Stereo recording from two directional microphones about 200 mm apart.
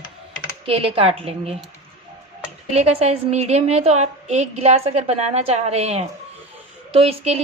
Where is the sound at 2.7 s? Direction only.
30° right (ahead or behind).